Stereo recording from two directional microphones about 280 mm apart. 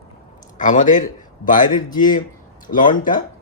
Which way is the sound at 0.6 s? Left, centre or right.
Left.